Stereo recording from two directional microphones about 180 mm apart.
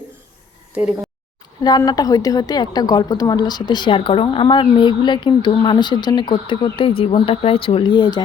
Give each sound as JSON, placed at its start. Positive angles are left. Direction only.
{"t": 0.8, "sound": "speech", "side_deg": -5}
{"t": 1.6, "sound": "a woman's voice", "side_deg": 20}